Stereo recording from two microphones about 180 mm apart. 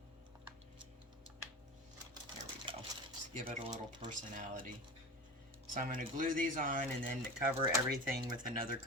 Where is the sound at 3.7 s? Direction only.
25° right (ahead or behind).